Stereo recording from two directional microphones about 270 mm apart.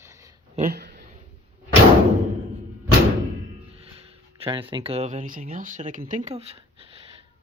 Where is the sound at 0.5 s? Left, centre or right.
Right.